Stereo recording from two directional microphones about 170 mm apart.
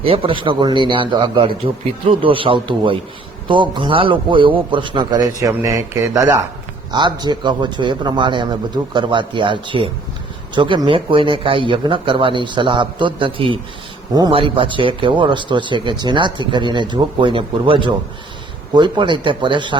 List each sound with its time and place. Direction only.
0.0 s a man's voice: 35° right (ahead or behind)